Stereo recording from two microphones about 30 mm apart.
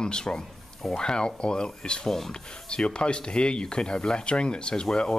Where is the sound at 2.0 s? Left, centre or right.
Centre.